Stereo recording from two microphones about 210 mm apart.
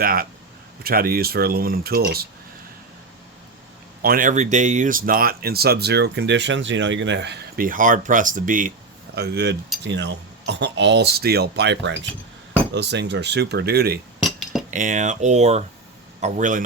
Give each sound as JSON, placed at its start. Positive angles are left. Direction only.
{"t": 0.0, "sound": "speech", "side_deg": -45}
{"t": 4.0, "sound": "speech", "side_deg": -40}
{"t": 9.1, "sound": "speech", "side_deg": -50}
{"t": 14.3, "sound": "cutlery", "side_deg": 0}
{"t": 14.7, "sound": "speech", "side_deg": -35}